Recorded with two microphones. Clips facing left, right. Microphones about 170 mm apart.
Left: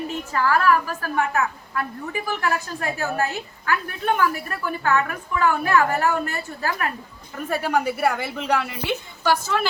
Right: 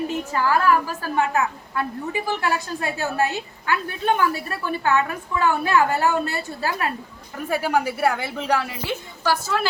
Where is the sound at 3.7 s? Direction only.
25° right (ahead or behind).